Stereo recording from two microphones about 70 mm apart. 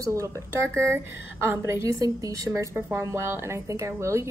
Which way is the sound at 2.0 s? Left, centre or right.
Right.